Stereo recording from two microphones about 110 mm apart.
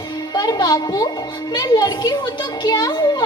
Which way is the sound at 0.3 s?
35° left (ahead or behind).